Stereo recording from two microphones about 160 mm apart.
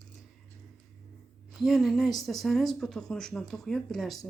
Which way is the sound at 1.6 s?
Centre (ahead or behind).